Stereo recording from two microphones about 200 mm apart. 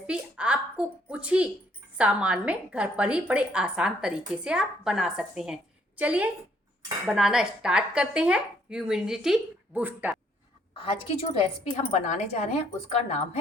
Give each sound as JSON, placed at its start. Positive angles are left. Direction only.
{"t": 0.1, "sound": "a sound", "side_deg": -5}
{"t": 2.0, "sound": "a woman's voice", "side_deg": -5}
{"t": 10.8, "sound": "a woman's voice", "side_deg": 25}